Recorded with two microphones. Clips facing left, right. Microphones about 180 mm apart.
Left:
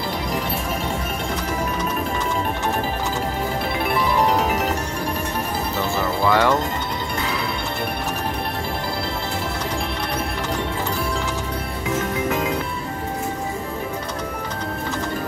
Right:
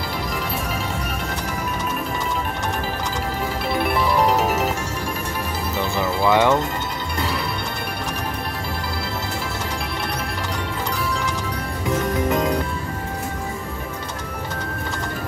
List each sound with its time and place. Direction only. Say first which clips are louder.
5.8 s music: right 1 dB; 15° right (ahead or behind)
12.3 s music: right 3 dB; 5° left (ahead or behind)